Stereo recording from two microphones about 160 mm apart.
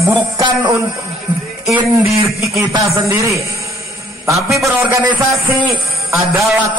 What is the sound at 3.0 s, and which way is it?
Speech, 20° right (ahead or behind).